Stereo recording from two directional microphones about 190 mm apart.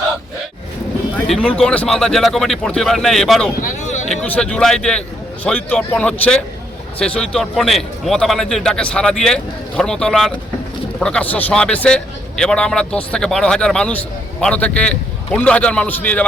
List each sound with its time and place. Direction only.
1.1 s a man's voice: 5° left (ahead or behind)
3.6 s a sound: 40° left (ahead or behind)
4.1 s a man's voice: 5° left (ahead or behind)